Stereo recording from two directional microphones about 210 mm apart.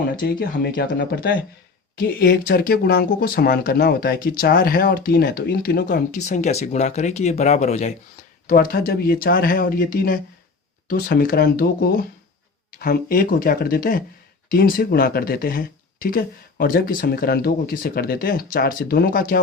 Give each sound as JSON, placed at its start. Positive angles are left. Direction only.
{"t": 0.3, "sound": "speech", "side_deg": 45}
{"t": 6.1, "sound": "speech", "side_deg": 35}
{"t": 8.4, "sound": "speech", "side_deg": 45}